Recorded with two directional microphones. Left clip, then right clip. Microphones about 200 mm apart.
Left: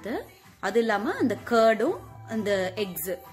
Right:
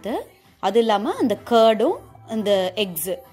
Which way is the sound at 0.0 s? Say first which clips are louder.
Right 6 dB; 25° right (ahead or behind).